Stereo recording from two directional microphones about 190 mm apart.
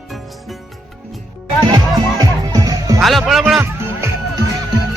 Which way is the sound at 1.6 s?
20° right (ahead or behind).